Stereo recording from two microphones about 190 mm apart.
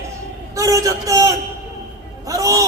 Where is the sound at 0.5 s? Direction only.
15° right (ahead or behind).